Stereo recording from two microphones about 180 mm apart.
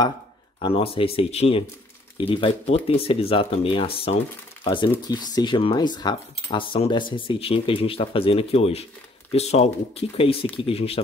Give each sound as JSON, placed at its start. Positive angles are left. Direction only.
{"t": 0.6, "sound": "speech", "side_deg": 30}